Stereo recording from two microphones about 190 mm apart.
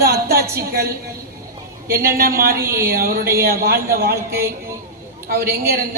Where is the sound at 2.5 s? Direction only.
15° right (ahead or behind).